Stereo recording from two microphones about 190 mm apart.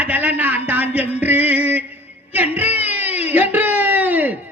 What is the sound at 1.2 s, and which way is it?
Music, 10° right (ahead or behind).